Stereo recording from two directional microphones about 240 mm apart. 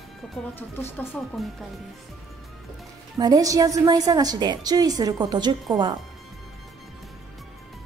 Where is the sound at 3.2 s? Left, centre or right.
Centre.